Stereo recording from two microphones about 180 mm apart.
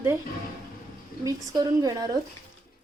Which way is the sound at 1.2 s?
20° right (ahead or behind).